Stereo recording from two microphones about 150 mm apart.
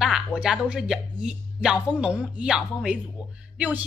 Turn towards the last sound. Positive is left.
turn(degrees=-10)  # may be behind; listen again after turning